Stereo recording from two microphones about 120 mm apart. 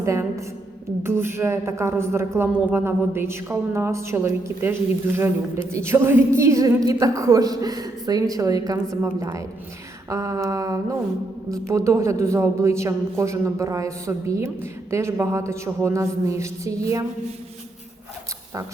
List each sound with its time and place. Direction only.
0.0 s a woman's voice: 25° right (ahead or behind)
5.7 s a woman's voice: 20° right (ahead or behind)
10.1 s a woman's voice: 30° right (ahead or behind)